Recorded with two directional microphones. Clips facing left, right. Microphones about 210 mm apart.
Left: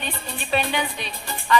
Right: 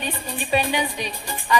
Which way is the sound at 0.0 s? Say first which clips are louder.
Right 3 dB; 10° right (ahead or behind).